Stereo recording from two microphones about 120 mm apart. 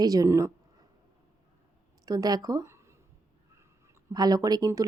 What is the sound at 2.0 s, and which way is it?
Speech, 30° right (ahead or behind).